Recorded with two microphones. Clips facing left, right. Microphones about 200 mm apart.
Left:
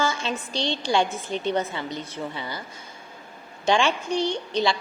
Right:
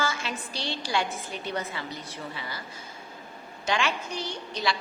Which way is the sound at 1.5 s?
25° left (ahead or behind).